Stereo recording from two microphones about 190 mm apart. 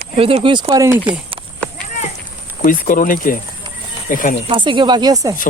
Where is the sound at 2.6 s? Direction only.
45° left (ahead or behind).